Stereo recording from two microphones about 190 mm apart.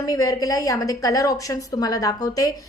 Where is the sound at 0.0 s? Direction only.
20° left (ahead or behind).